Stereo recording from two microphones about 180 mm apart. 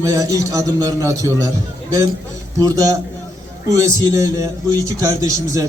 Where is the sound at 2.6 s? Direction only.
20° right (ahead or behind).